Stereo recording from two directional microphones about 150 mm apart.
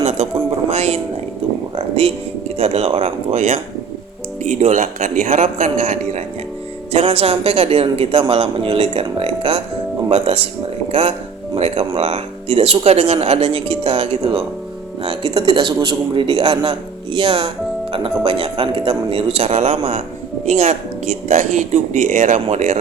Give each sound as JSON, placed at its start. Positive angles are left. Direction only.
{"t": 0.0, "sound": "a sound", "side_deg": -50}
{"t": 0.7, "sound": "speech", "side_deg": -45}
{"t": 1.7, "sound": "a sound", "side_deg": -40}
{"t": 2.6, "sound": "a man's voice", "side_deg": -45}
{"t": 4.6, "sound": "a man's voice", "side_deg": -50}
{"t": 11.5, "sound": "a man's voice", "side_deg": -40}